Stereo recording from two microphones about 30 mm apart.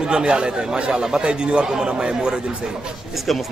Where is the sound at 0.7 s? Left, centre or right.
Right.